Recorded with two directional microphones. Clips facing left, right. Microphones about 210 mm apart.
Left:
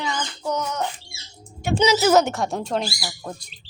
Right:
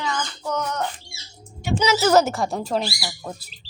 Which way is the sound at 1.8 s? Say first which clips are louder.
Left 2 dB; 20° left (ahead or behind).